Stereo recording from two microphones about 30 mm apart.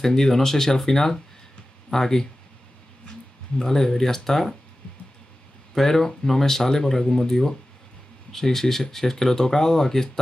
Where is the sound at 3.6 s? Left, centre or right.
Centre.